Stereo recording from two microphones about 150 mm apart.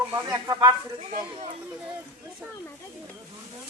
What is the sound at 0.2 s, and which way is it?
Speech, 20° right (ahead or behind).